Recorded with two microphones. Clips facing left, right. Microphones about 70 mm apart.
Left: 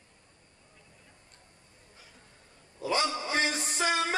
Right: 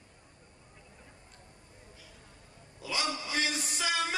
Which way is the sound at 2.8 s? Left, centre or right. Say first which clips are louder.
Left 5 dB; left.